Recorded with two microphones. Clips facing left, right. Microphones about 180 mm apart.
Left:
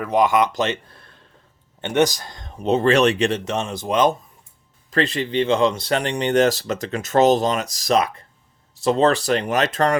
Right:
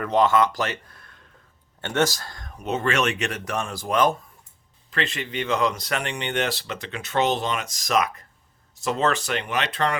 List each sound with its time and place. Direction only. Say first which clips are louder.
0.0 s speech: left 2 dB; 10° left (ahead or behind); by 1.2 s 30° left (ahead or behind)
1.8 s speech: left 5 dB; 15° left (ahead or behind)
4.9 s speech: left 7 dB; 35° left (ahead or behind)